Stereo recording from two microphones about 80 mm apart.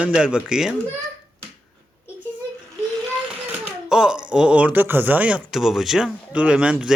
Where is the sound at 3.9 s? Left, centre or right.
Centre.